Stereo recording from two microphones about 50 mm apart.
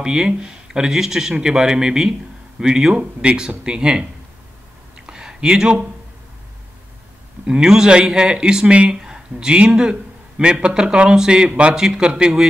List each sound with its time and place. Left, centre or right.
0.0 s speech: centre
4.9 s a sound: centre
7.4 s speech: centre